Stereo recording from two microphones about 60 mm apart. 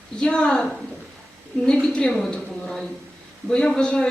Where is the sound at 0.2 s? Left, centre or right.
Centre.